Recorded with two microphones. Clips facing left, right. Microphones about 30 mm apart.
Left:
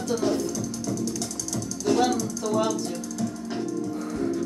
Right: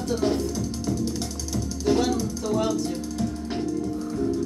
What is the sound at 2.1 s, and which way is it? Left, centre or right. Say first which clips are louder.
Speech: right 1 dB; right.